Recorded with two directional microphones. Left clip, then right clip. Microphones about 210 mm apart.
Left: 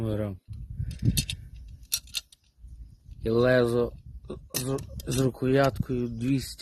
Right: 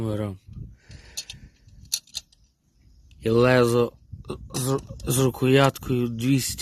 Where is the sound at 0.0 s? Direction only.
35° right (ahead or behind).